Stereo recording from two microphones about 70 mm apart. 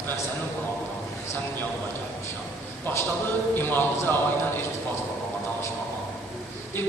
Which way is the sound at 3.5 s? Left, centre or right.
Left.